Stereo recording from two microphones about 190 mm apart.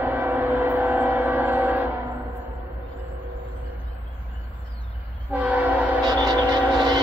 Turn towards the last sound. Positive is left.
turn(degrees=-20)  # may be behind; listen again after turning